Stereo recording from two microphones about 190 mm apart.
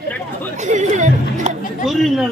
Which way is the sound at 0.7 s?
40° right (ahead or behind).